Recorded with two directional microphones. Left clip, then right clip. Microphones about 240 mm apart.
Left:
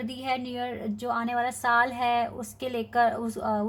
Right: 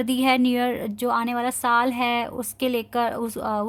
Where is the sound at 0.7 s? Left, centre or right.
Right.